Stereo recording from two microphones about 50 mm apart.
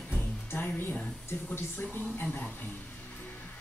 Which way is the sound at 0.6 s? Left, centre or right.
Left.